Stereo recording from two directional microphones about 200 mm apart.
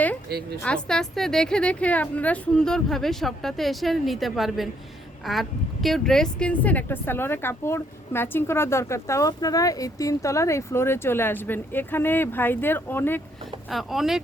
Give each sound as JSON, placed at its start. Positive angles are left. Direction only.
{"t": 0.3, "sound": "a woman's voice", "side_deg": -50}
{"t": 0.6, "sound": "a woman's voice", "side_deg": 5}
{"t": 13.7, "sound": "a woman's voice", "side_deg": 0}